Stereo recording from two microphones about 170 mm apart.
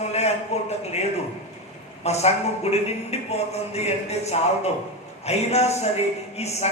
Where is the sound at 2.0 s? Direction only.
40° left (ahead or behind).